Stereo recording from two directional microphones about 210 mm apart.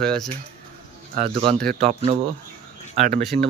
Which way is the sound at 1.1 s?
30° right (ahead or behind).